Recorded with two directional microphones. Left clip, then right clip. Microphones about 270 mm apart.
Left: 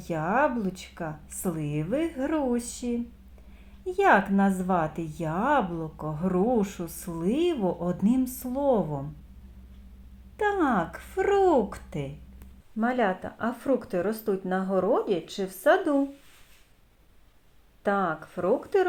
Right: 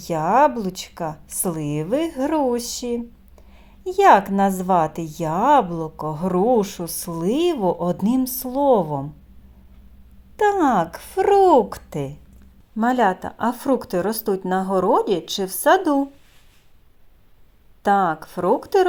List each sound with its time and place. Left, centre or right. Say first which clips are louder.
0.0 s a woman's voice: right 9 dB; right
10.3 s a woman's voice: right 8 dB; right
17.8 s a woman's voice: right 8 dB; right